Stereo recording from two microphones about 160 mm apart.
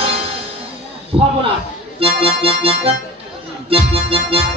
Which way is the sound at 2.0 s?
35° right (ahead or behind).